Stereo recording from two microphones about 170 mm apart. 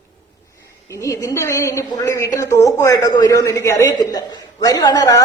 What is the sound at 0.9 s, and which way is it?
A woman's voice, 20° left (ahead or behind).